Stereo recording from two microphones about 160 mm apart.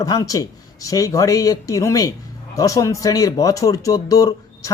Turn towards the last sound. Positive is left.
turn(degrees=20)  # may be behind; listen again after turning